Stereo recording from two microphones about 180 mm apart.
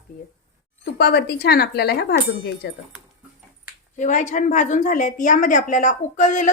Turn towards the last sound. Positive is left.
turn(degrees=45)  # may be behind; listen again after turning